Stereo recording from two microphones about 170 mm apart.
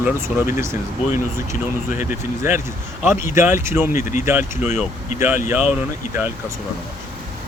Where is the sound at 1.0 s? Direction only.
45° left (ahead or behind).